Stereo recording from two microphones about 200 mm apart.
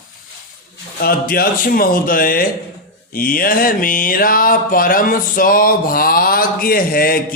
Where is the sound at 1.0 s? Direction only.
45° left (ahead or behind).